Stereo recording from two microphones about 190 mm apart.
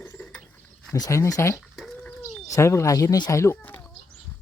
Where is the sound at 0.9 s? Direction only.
15° left (ahead or behind).